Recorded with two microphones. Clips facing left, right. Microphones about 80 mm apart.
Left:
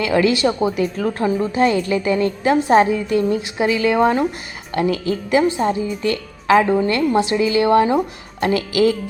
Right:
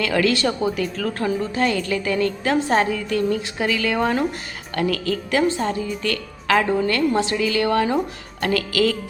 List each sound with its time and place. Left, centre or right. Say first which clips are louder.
0.0 s a woman's voice: left 3 dB; centre